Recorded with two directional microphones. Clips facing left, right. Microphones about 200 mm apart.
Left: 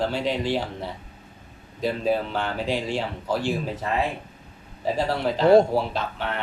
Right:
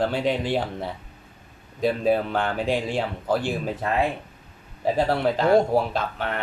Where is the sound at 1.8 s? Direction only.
55° right (ahead or behind).